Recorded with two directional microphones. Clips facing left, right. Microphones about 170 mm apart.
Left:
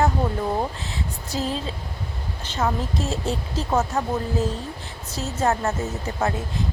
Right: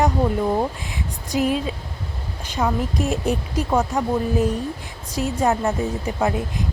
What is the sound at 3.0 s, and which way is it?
Speech, 15° right (ahead or behind).